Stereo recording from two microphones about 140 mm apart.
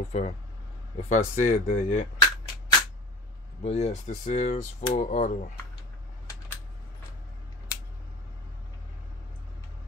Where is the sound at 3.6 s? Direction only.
50° left (ahead or behind).